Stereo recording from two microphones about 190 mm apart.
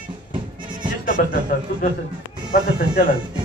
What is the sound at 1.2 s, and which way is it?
Speech, 50° left (ahead or behind).